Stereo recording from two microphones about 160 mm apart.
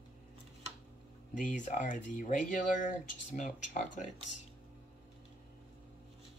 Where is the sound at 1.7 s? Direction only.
50° left (ahead or behind).